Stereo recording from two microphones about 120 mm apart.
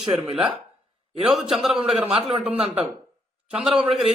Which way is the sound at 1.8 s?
50° right (ahead or behind).